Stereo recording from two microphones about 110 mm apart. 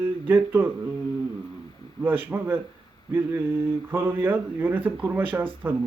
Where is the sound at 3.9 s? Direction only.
20° right (ahead or behind).